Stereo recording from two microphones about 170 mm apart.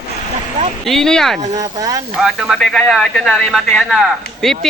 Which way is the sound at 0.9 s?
Centre (ahead or behind).